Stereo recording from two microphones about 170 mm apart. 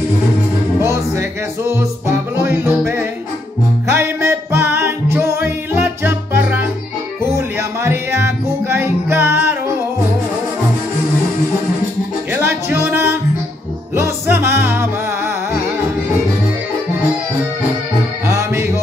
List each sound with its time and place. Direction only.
0.7 s music: 15° right (ahead or behind)
3.9 s music: 15° right (ahead or behind)
12.3 s music: 15° right (ahead or behind)
18.2 s music: 15° right (ahead or behind)